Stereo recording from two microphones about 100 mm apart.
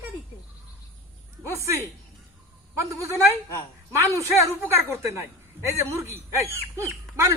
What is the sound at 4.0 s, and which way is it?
Speech, 30° right (ahead or behind).